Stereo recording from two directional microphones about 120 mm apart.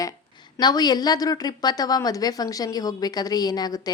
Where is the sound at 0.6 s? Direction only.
35° left (ahead or behind).